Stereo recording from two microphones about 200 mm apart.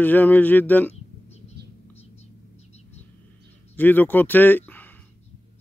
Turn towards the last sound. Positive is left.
turn(degrees=10)  # may be behind; listen again after turning